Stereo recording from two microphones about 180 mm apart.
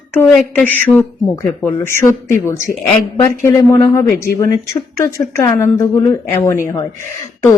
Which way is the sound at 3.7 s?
15° left (ahead or behind).